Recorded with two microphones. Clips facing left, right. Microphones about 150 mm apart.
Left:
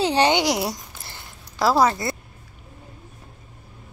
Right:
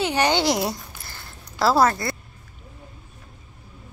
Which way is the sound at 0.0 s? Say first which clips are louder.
Left 3 dB; 30° left (ahead or behind).